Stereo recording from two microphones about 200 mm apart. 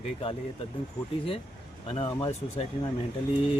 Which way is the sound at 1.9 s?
25° left (ahead or behind).